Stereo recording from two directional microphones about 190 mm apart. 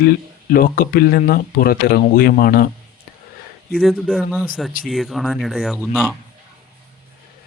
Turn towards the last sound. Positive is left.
turn(degrees=0)  # may be behind; listen again after turning